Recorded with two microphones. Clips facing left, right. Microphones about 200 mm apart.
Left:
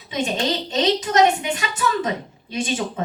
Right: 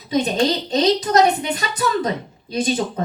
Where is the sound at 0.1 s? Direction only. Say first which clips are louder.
Right 5 dB; 40° right (ahead or behind).